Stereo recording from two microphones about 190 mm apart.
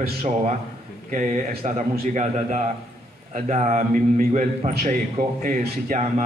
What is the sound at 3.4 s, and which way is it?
A man's voice, 40° right (ahead or behind).